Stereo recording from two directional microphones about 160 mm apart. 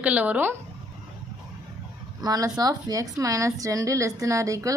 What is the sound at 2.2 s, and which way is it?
A woman's voice, 25° right (ahead or behind).